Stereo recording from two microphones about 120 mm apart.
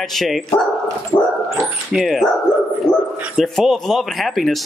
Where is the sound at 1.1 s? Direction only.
35° left (ahead or behind).